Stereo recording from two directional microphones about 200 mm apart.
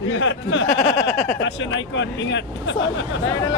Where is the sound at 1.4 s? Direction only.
65° left (ahead or behind).